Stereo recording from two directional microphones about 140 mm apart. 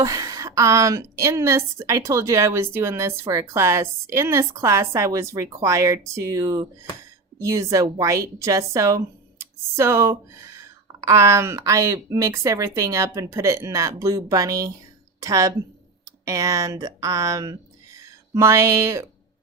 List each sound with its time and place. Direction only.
0.0 s speech: 25° right (ahead or behind)